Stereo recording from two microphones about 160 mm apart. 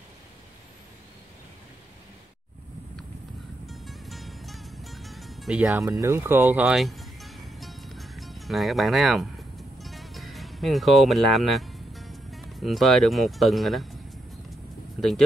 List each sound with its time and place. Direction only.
3.6 s music: centre (ahead or behind)
5.9 s speech: 15° right (ahead or behind)
6.8 s music: centre (ahead or behind)
15.0 s speech: centre (ahead or behind)